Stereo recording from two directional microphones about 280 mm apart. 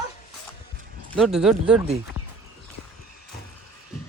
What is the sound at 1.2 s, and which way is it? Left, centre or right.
Speech, centre.